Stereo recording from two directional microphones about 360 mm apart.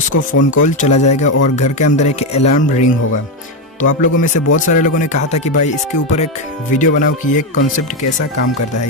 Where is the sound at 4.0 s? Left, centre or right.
Left.